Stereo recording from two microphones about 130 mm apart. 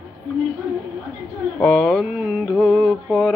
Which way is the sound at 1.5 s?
5° left (ahead or behind).